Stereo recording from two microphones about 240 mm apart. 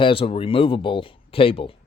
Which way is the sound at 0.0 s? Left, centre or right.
Left.